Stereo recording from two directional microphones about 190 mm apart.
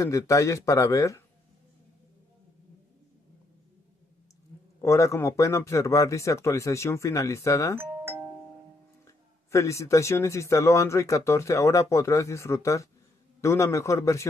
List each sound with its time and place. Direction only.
0.0 s speech: 15° left (ahead or behind)
4.8 s speech: 15° left (ahead or behind)
7.7 s doorbell: 10° right (ahead or behind)
9.0 s speech: 15° left (ahead or behind)